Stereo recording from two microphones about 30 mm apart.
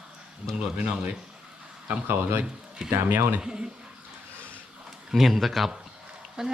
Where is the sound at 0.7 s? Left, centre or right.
Right.